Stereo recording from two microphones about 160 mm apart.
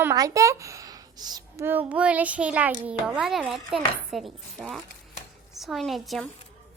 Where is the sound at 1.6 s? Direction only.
10° right (ahead or behind).